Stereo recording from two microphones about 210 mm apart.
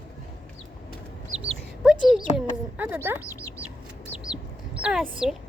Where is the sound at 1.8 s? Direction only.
Centre (ahead or behind).